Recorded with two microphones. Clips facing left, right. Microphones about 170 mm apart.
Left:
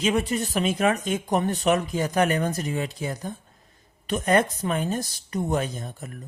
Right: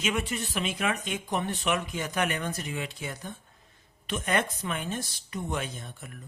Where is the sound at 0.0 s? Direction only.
35° left (ahead or behind).